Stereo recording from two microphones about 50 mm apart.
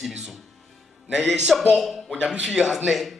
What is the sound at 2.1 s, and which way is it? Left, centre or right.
Speech, right.